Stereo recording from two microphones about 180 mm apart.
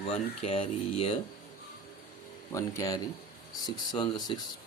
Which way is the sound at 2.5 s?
20° left (ahead or behind).